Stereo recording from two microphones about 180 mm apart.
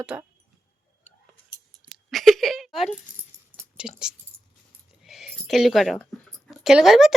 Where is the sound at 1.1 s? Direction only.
40° left (ahead or behind).